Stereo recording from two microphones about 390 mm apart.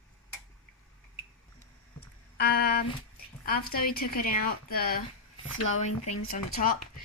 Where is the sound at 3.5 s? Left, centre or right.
Left.